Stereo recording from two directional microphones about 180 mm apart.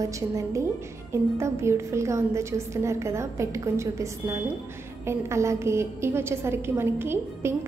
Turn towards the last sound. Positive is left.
turn(degrees=-15)  # may be behind; listen again after turning